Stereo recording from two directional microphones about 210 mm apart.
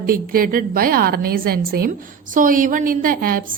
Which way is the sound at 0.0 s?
45° right (ahead or behind).